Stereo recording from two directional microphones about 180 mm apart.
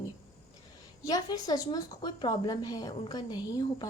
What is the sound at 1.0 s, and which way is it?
A woman's voice, 20° left (ahead or behind).